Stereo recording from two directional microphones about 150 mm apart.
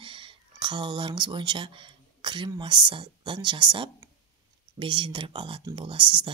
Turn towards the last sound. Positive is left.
turn(degrees=-30)  # may be behind; listen again after turning